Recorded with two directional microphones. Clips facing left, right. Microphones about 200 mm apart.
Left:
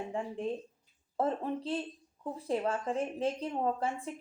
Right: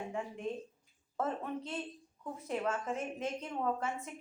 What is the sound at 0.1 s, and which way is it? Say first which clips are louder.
A woman's voice: left 4 dB; 30° left (ahead or behind).